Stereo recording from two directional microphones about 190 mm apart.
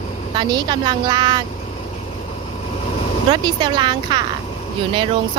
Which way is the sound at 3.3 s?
25° right (ahead or behind).